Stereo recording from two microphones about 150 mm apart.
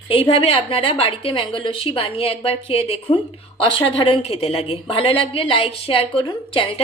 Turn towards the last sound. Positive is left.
turn(degrees=35)  # may be behind; listen again after turning